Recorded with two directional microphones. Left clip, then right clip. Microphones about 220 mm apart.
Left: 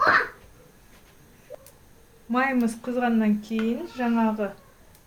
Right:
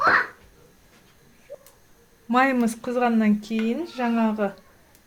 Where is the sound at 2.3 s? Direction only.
50° right (ahead or behind).